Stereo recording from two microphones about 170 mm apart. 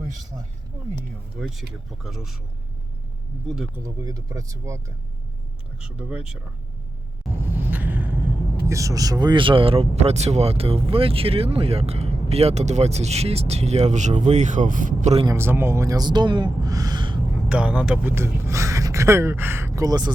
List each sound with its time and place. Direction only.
1.4 s speech: 5° right (ahead or behind)
3.4 s speech: 5° right (ahead or behind)
3.8 s speech: 20° right (ahead or behind)
5.8 s speech: 5° right (ahead or behind)
7.5 s a sound: 10° right (ahead or behind)
8.6 s speech: 20° right (ahead or behind); by 15.1 s 50° right (ahead or behind)
15.3 s speech: 15° right (ahead or behind)
17.5 s speech: 5° right (ahead or behind); by 20.1 s 20° right (ahead or behind)